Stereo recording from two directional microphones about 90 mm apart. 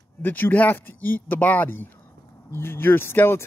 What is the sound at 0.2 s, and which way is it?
A man's voice, 20° left (ahead or behind).